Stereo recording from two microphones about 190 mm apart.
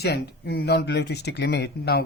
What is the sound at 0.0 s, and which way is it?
Speech, 60° left (ahead or behind).